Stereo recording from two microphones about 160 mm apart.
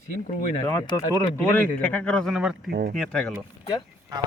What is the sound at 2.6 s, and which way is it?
Speech, 70° right (ahead or behind).